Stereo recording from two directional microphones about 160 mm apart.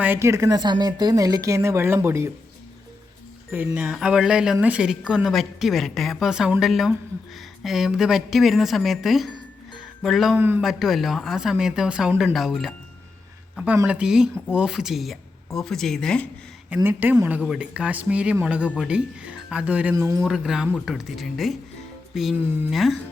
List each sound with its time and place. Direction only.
0.0 s speech: 15° right (ahead or behind)
3.5 s speech: 10° right (ahead or behind)
10.3 s speech: 10° right (ahead or behind)
10.6 s speech: centre (ahead or behind)
13.8 s speech: 5° right (ahead or behind)
16.6 s speech: 10° right (ahead or behind)
20.2 s speech: centre (ahead or behind)